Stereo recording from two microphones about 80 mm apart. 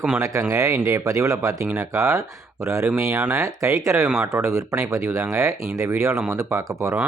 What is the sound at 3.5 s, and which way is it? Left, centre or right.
Speech, right.